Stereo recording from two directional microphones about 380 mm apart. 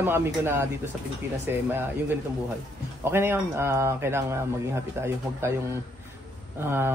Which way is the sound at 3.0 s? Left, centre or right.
Centre.